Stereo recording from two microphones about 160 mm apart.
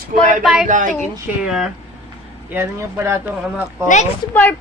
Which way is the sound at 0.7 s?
55° right (ahead or behind).